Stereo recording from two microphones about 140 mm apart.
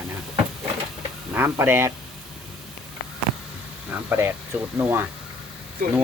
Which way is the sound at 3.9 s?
15° right (ahead or behind).